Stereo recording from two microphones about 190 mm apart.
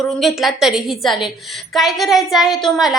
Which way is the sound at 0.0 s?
Centre (ahead or behind).